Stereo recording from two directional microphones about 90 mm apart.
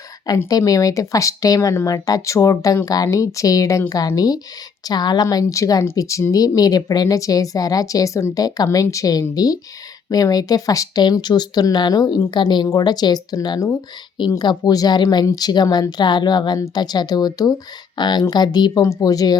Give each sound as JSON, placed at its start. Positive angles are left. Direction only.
{"t": 0.5, "sound": "a woman's voice", "side_deg": 40}
{"t": 12.6, "sound": "a woman's voice", "side_deg": 45}
{"t": 18.8, "sound": "a woman's voice", "side_deg": 40}